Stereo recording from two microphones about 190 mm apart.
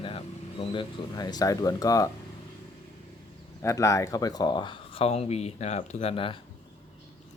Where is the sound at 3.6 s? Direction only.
15° left (ahead or behind).